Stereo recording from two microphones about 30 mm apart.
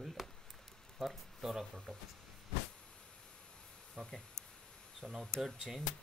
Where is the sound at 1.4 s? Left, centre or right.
Centre.